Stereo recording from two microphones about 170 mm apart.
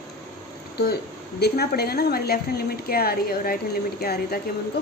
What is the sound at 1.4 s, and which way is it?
A woman's voice, 70° left (ahead or behind).